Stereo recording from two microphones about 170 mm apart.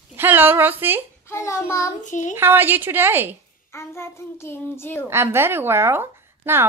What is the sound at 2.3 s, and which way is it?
A woman's voice, 15° right (ahead or behind).